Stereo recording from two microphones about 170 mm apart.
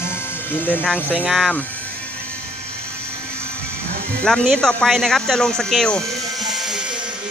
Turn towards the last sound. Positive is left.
turn(degrees=0)  # may be behind; listen again after turning